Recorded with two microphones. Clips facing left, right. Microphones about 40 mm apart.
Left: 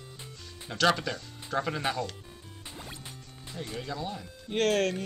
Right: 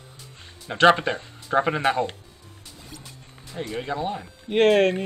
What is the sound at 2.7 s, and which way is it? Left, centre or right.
Music, left.